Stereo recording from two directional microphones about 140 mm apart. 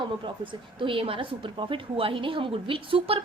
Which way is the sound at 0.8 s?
40° right (ahead or behind).